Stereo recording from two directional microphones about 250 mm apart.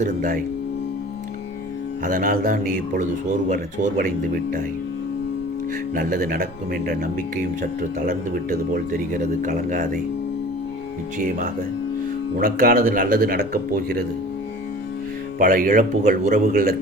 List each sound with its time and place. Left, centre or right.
0.0 s speech: right
2.0 s speech: right
5.9 s speech: right
12.4 s speech: right
15.4 s speech: right